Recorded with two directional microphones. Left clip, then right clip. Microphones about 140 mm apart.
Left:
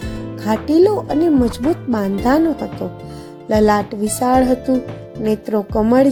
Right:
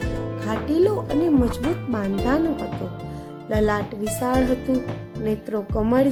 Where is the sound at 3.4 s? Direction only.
45° left (ahead or behind).